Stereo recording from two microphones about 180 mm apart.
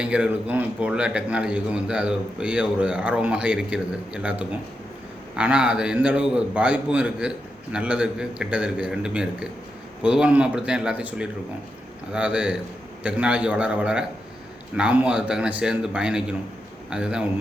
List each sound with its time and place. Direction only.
0.0 s a man's voice: 5° right (ahead or behind)